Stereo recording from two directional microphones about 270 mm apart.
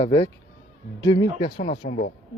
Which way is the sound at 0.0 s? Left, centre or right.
Left.